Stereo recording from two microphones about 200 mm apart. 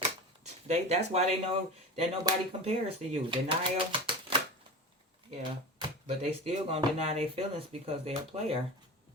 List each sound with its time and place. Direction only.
0.4 s speech: 35° right (ahead or behind)
6.1 s speech: 30° right (ahead or behind)